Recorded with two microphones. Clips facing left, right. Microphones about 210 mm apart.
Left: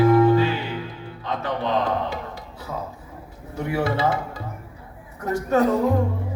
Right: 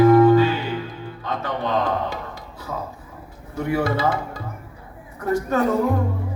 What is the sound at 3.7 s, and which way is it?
Speech, 40° right (ahead or behind).